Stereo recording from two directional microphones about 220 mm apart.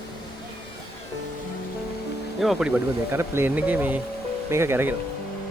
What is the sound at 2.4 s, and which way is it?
Speech, centre (ahead or behind).